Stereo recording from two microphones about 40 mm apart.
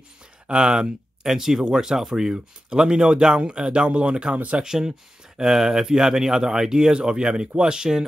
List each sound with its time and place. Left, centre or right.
0.5 s speech: right
1.2 s speech: centre